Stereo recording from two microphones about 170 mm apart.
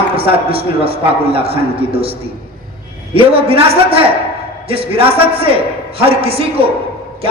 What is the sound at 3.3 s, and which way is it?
A man's voice, 35° right (ahead or behind).